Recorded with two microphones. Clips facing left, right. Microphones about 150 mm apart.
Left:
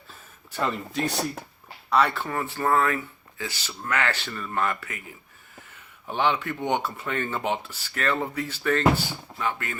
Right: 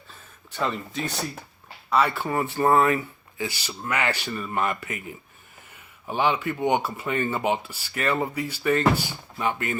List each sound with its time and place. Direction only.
0.1 s speech: centre (ahead or behind); by 4.9 s 20° right (ahead or behind)
6.1 s speech: 5° right (ahead or behind)